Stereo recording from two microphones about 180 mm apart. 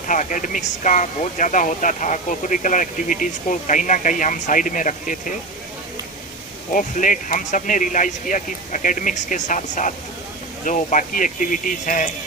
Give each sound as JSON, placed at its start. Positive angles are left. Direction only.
{"t": 0.1, "sound": "speech", "side_deg": 45}
{"t": 6.7, "sound": "speech", "side_deg": 45}